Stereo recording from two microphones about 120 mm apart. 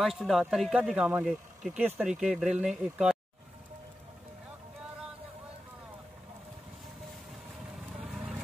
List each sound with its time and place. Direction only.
0.0 s speech: centre (ahead or behind)
8.0 s vehicle: 5° right (ahead or behind)